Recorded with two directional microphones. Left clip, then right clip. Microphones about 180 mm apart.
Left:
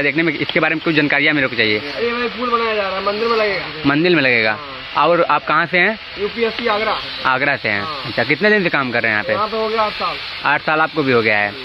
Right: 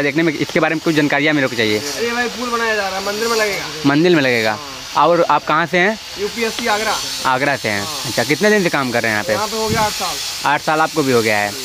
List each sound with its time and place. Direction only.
0.0 s speech: 25° right (ahead or behind)
3.8 s speech: 30° right (ahead or behind)
7.2 s speech: 25° right (ahead or behind)
10.4 s speech: 25° right (ahead or behind)